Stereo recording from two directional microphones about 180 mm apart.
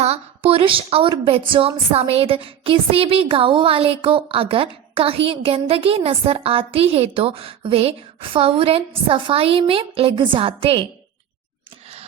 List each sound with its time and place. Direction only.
0.0 s a woman's voice: 35° right (ahead or behind)